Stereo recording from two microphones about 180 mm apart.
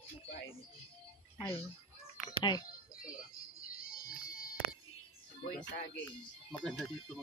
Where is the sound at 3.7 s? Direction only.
55° left (ahead or behind).